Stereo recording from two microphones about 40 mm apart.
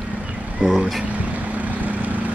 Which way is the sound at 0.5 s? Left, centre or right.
Right.